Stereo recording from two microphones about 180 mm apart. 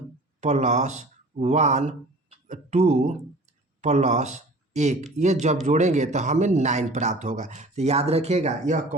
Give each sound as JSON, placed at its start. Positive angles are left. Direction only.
{"t": 0.4, "sound": "speech", "side_deg": -40}